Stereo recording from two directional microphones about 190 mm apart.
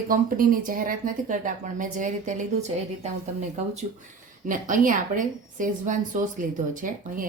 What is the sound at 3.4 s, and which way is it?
Speech, 35° right (ahead or behind).